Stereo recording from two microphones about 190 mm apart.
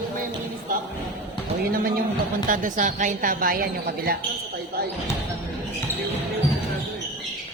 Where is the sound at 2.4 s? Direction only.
45° right (ahead or behind).